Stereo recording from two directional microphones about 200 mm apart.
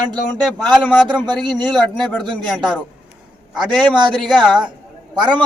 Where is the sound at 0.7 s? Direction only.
5° left (ahead or behind).